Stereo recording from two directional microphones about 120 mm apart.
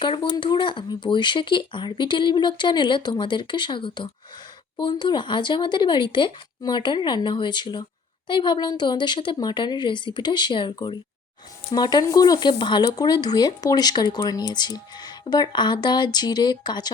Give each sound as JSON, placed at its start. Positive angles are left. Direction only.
{"t": 0.0, "sound": "speech", "side_deg": 45}